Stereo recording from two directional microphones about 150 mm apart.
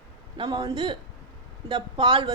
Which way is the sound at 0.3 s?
30° right (ahead or behind).